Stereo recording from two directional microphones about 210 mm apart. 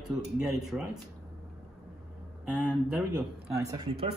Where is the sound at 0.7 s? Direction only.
5° right (ahead or behind).